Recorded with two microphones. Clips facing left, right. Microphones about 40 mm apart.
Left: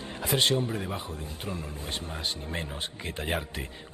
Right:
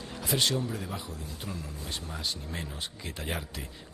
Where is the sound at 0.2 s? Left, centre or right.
Left.